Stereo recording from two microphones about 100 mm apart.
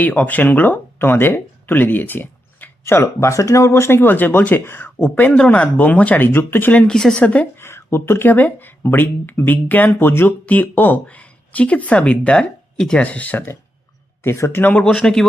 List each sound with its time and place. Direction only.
0.0 s speech: 15° left (ahead or behind)
7.5 s speech: 25° left (ahead or behind)
14.8 s speech: 5° left (ahead or behind)